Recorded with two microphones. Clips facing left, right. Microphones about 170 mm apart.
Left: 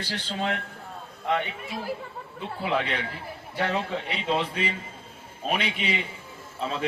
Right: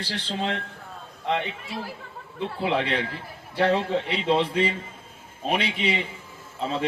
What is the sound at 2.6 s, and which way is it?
A man's voice, 30° right (ahead or behind).